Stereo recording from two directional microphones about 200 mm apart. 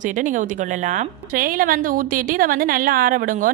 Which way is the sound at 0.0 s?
40° right (ahead or behind).